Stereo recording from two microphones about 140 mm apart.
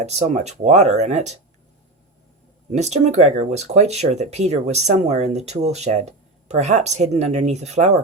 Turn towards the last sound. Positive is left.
turn(degrees=-55)  # may be behind; listen again after turning